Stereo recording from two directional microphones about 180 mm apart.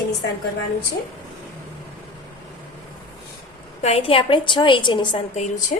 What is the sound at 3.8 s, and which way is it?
A woman's voice, 35° left (ahead or behind).